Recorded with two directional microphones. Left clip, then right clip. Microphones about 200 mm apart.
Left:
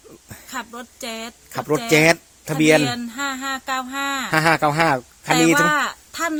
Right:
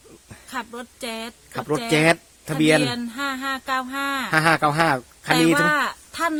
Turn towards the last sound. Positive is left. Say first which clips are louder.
# even
turn(degrees=0)  # may be behind; listen again after turning